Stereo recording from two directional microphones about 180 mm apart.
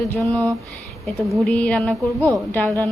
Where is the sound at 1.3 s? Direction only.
5° left (ahead or behind).